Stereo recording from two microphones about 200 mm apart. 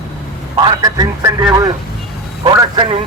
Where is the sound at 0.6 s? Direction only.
20° right (ahead or behind).